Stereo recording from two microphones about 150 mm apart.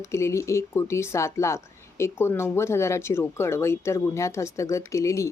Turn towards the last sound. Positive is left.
turn(degrees=20)  # may be behind; listen again after turning